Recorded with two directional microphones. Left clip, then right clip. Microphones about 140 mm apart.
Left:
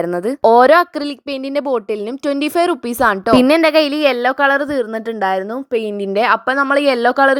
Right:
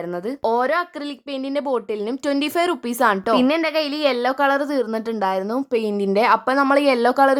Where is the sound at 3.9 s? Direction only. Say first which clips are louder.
Left 5 dB; 30° left (ahead or behind).